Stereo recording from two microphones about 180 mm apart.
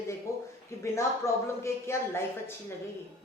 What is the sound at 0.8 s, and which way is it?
A woman's voice, 15° left (ahead or behind).